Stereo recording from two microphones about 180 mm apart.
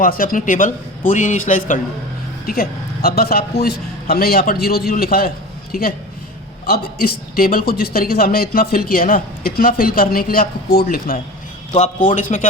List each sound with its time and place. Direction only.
0.0 s a man's voice: 50° left (ahead or behind)
6.7 s a man's voice: 55° left (ahead or behind)